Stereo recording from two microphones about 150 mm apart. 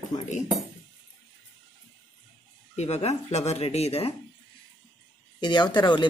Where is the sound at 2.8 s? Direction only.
45° left (ahead or behind).